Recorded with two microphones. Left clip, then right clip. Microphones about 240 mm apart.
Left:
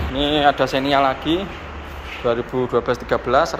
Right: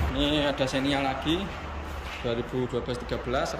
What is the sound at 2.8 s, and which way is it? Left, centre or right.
Speech, centre.